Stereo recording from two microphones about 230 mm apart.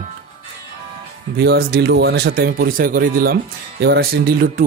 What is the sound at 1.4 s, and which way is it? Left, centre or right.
A man's voice, right.